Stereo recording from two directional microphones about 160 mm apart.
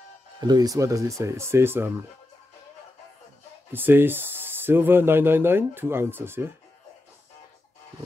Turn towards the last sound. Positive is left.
turn(degrees=-15)  # may be behind; listen again after turning